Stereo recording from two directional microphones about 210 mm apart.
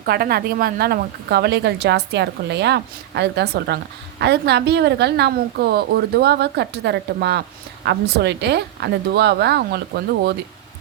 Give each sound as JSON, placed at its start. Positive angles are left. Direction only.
{"t": 0.0, "sound": "a woman's voice", "side_deg": -45}